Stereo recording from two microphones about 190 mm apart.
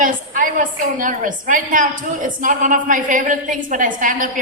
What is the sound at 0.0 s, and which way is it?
A woman's voice, 45° right (ahead or behind).